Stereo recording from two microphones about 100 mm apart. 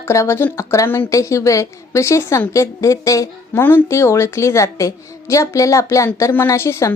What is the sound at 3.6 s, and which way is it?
A woman's voice, 20° left (ahead or behind).